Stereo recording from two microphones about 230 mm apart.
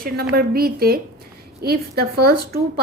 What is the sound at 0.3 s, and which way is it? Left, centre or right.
A woman's voice, right.